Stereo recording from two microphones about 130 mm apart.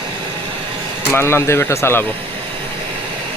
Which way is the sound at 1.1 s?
20° left (ahead or behind).